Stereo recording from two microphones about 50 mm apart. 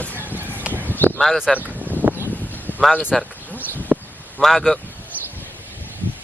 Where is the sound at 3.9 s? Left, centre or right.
Right.